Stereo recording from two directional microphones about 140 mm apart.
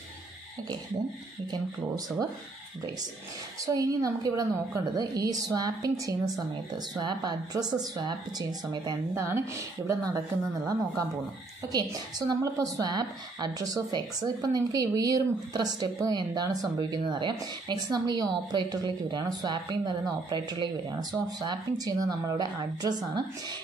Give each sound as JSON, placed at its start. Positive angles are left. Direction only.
{"t": 3.6, "sound": "a woman's voice", "side_deg": -25}
{"t": 11.7, "sound": "a woman's voice", "side_deg": -30}